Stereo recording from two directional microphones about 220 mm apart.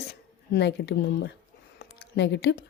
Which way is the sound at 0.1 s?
50° left (ahead or behind).